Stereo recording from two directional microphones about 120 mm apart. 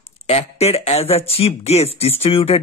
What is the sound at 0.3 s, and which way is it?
Speech, 60° left (ahead or behind).